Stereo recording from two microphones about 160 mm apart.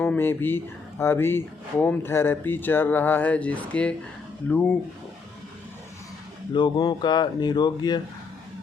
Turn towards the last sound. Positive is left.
turn(degrees=25)  # may be behind; listen again after turning